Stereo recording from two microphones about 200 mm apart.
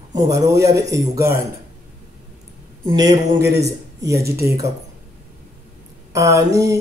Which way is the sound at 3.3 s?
15° right (ahead or behind).